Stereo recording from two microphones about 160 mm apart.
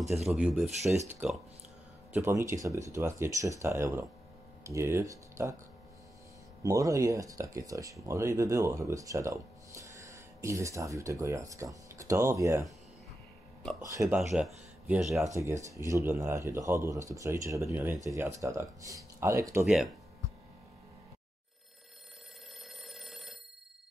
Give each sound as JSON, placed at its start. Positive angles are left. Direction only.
{"t": 0.2, "sound": "speech", "side_deg": -5}
{"t": 2.1, "sound": "speech", "side_deg": -15}
{"t": 6.6, "sound": "speech", "side_deg": -20}
{"t": 13.7, "sound": "speech", "side_deg": -20}
{"t": 14.3, "sound": "speech", "side_deg": -5}
{"t": 15.2, "sound": "speech", "side_deg": -20}
{"t": 19.6, "sound": "speech", "side_deg": -5}
{"t": 22.8, "sound": "telephone bell ringing", "side_deg": 0}